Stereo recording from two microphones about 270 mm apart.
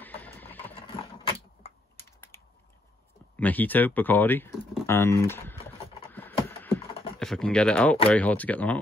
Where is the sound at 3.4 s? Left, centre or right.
Centre.